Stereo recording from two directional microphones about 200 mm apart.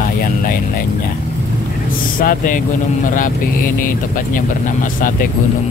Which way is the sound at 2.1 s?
40° left (ahead or behind).